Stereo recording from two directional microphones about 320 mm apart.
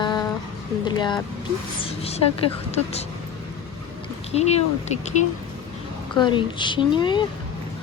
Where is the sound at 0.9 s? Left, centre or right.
Centre.